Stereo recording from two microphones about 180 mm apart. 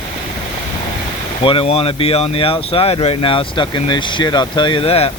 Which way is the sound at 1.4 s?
30° left (ahead or behind).